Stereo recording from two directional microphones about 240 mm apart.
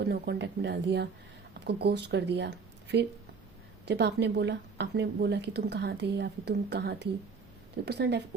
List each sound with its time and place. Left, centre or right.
0.0 s a woman's voice: right